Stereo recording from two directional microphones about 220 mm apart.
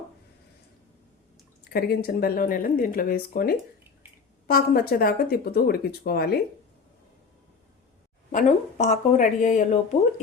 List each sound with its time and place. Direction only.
1.7 s speech: 45° left (ahead or behind)
8.3 s a woman's voice: 35° left (ahead or behind)